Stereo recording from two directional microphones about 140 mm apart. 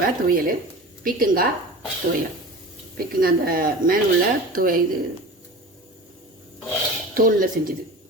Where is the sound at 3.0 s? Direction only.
90° right.